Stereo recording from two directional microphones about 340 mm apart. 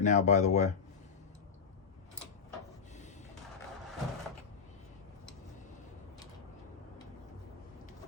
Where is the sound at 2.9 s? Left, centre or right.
Left.